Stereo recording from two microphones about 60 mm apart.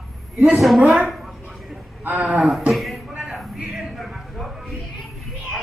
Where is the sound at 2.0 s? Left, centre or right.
Right.